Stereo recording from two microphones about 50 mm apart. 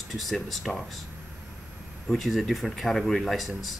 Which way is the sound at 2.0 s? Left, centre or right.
Centre.